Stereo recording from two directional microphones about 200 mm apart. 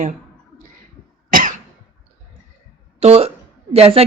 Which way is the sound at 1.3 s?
40° right (ahead or behind).